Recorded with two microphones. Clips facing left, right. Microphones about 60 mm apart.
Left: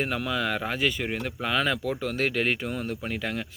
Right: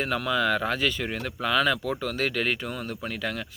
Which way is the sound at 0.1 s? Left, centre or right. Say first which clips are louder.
Right 3 dB; left.